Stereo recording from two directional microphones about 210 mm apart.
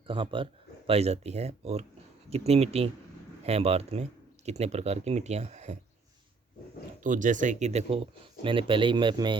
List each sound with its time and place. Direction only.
0.1 s speech: 25° right (ahead or behind)
7.0 s speech: 40° right (ahead or behind); by 9.3 s 20° right (ahead or behind)